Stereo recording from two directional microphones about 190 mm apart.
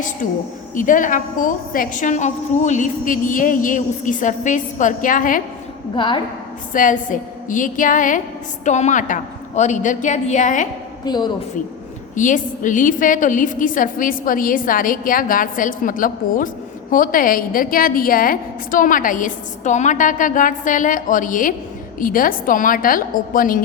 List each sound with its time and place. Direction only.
0.8 s a woman's voice: 45° left (ahead or behind)
5.9 s a woman's voice: 25° left (ahead or behind)
6.7 s a woman's voice: 45° left (ahead or behind)
11.0 s a woman's voice: 20° left (ahead or behind)
12.1 s a woman's voice: 45° left (ahead or behind)